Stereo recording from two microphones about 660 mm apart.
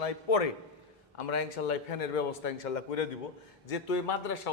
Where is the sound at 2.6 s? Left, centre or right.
Left.